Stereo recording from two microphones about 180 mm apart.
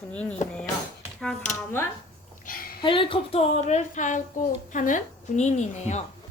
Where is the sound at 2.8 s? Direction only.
30° left (ahead or behind).